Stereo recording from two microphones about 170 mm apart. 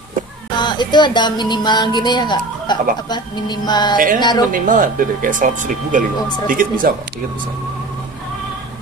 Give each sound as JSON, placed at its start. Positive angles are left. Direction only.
{"t": 0.6, "sound": "speech", "side_deg": 25}
{"t": 4.5, "sound": "speech", "side_deg": -50}